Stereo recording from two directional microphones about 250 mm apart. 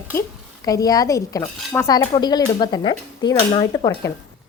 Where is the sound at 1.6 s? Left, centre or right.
Centre.